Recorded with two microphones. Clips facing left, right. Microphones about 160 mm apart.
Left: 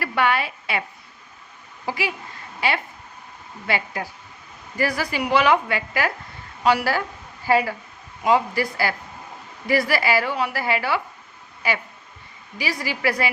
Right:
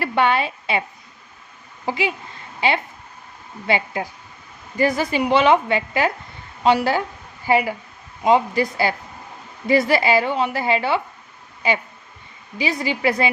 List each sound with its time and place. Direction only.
0.0 s a woman's voice: 25° right (ahead or behind)